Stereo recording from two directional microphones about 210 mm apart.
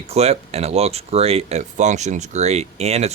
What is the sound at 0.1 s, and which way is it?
Speech, 30° right (ahead or behind).